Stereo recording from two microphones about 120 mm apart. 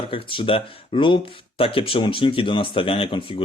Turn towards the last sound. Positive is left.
turn(degrees=45)  # may be behind; listen again after turning